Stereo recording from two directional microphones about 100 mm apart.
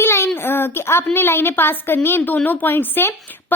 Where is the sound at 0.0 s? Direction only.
25° left (ahead or behind).